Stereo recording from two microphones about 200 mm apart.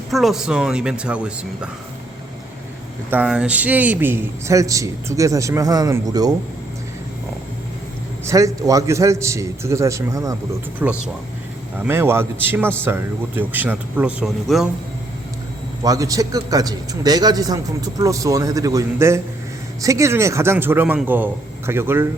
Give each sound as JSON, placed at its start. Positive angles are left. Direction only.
{"t": 0.1, "sound": "speech", "side_deg": 0}
{"t": 3.1, "sound": "a man's voice", "side_deg": -5}
{"t": 8.2, "sound": "a man's voice", "side_deg": -15}
{"t": 15.8, "sound": "a man's voice", "side_deg": -15}